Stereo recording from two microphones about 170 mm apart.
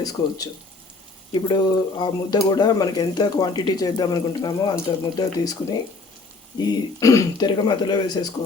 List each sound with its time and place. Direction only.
0.0 s speech: 20° left (ahead or behind)
6.6 s speech: 20° left (ahead or behind)